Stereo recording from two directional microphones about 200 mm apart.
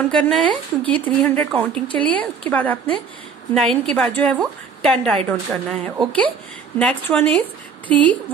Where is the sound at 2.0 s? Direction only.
25° right (ahead or behind).